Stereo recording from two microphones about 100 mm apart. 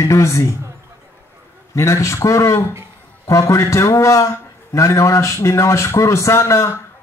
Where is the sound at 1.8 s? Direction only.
30° left (ahead or behind).